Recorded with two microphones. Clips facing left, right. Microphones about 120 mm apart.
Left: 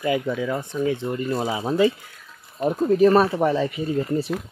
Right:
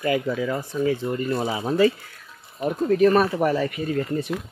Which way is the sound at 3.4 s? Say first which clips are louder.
Left 1 dB; 20° left (ahead or behind).